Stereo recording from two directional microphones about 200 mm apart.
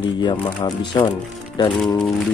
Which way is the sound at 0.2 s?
25° left (ahead or behind).